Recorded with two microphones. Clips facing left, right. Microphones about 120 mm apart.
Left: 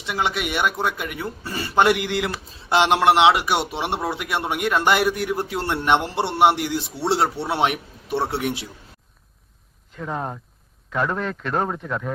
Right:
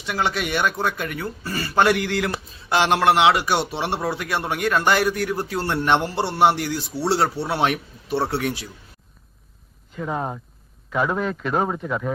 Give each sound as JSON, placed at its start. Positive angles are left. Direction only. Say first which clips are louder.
{"t": 0.0, "sound": "a man's voice", "louder": "even", "side_deg": 20}
{"t": 9.9, "sound": "a man's voice", "louder": "right 2 dB", "side_deg": 0}